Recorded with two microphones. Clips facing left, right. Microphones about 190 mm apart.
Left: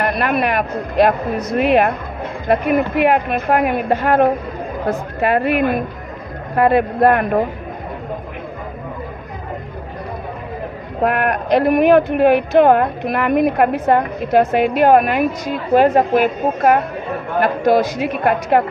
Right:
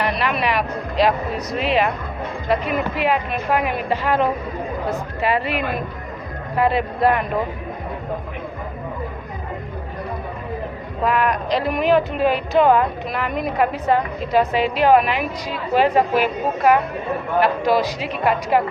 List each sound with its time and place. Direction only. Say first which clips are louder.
0.0 s speech: left 4 dB; 50° left (ahead or behind)
11.0 s speech: left 2 dB; 60° left (ahead or behind)